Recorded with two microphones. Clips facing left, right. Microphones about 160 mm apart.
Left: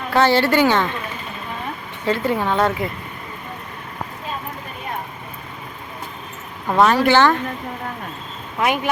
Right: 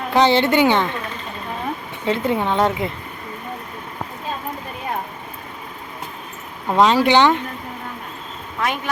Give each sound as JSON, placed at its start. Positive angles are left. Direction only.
{"t": 0.1, "sound": "a woman's voice", "side_deg": -20}
{"t": 2.0, "sound": "a woman's voice", "side_deg": -20}
{"t": 6.7, "sound": "speech", "side_deg": -20}
{"t": 8.6, "sound": "speech", "side_deg": 15}